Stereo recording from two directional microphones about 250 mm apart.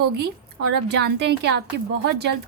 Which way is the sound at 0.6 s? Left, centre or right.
Right.